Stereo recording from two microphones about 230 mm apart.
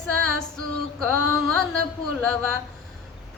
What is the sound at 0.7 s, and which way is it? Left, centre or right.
Female singing, centre.